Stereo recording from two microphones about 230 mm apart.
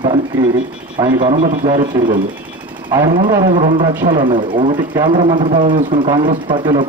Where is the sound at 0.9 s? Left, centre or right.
Right.